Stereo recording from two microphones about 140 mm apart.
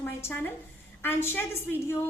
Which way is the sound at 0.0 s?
15° left (ahead or behind).